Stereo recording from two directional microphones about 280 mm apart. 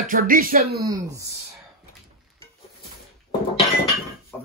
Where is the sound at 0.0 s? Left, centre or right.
Right.